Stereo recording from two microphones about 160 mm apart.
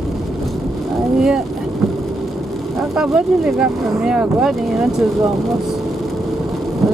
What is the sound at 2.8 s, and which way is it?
Speech, 5° right (ahead or behind).